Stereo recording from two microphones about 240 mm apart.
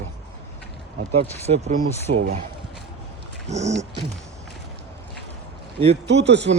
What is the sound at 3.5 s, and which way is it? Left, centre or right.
Speech, right.